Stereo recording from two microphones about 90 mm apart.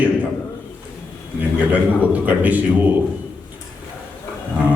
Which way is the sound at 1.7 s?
20° right (ahead or behind).